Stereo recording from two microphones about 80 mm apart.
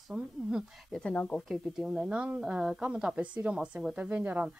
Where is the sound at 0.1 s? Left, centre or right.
Centre.